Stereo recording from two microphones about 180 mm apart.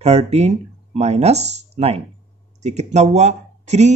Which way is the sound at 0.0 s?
35° right (ahead or behind).